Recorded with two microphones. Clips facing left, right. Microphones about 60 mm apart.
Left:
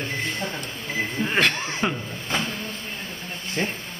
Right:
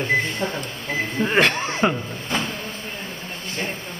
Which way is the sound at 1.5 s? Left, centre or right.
Right.